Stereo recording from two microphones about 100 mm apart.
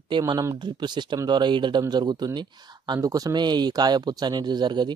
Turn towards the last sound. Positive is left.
turn(degrees=-45)  # may be behind; listen again after turning